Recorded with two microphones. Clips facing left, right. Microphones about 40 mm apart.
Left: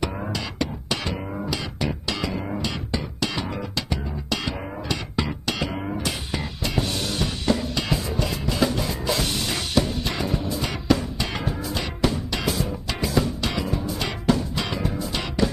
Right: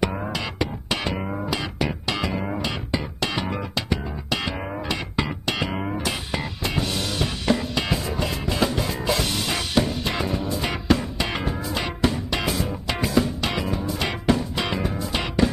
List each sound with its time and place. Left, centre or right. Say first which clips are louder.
0.3 s music: right 1 dB; right